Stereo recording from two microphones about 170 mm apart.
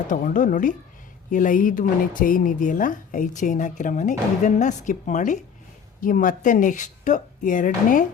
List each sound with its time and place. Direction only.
0.1 s speech: 50° left (ahead or behind)